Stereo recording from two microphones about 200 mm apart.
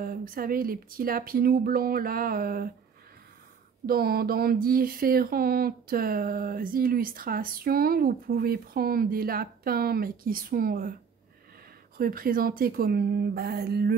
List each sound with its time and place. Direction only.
0.0 s speech: 45° right (ahead or behind)
3.8 s speech: 50° right (ahead or behind)
12.0 s speech: 45° right (ahead or behind)